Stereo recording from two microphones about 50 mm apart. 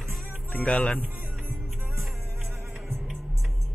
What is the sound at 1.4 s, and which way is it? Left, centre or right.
Music, right.